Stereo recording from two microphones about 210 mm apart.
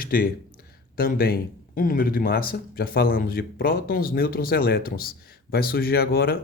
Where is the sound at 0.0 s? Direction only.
40° left (ahead or behind).